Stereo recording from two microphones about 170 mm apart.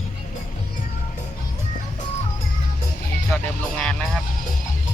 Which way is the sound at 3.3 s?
5° left (ahead or behind).